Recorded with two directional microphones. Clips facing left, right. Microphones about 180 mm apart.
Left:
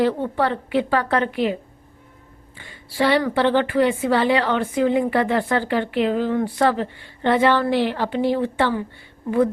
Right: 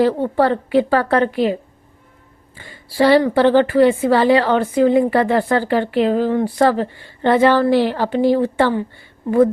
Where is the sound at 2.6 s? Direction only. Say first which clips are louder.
Right 5 dB; 40° right (ahead or behind).